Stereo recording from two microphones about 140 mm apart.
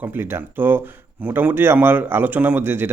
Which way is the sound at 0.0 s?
15° right (ahead or behind).